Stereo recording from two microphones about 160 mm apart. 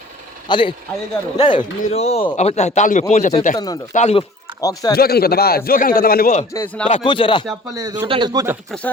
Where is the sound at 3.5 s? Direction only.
25° left (ahead or behind).